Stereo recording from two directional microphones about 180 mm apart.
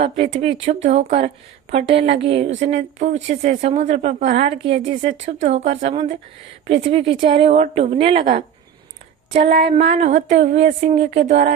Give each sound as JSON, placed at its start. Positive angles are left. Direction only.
{"t": 0.3, "sound": "a woman's voice", "side_deg": -35}
{"t": 8.2, "sound": "speech", "side_deg": -50}
{"t": 9.3, "sound": "a woman's voice", "side_deg": -40}